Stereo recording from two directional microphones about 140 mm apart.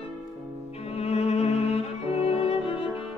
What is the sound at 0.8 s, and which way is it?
Music, 50° left (ahead or behind).